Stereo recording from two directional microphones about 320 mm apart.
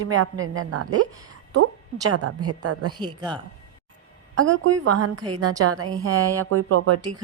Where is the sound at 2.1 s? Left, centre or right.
Right.